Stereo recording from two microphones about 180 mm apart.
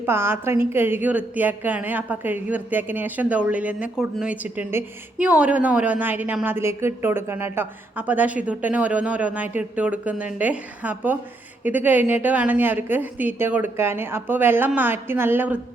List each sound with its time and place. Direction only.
0.0 s a woman's voice: 15° right (ahead or behind)